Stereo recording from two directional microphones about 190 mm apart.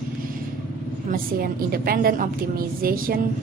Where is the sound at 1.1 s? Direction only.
50° right (ahead or behind).